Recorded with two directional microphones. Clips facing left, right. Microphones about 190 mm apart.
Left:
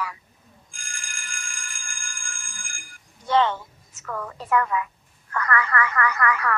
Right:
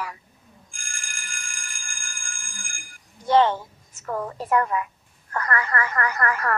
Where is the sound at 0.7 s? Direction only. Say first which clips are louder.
Left 1 dB; 45° right (ahead or behind).